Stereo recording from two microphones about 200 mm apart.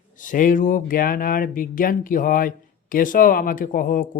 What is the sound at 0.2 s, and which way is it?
Speech, 40° left (ahead or behind).